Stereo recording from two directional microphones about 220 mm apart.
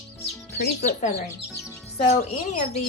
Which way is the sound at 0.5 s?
50° left (ahead or behind).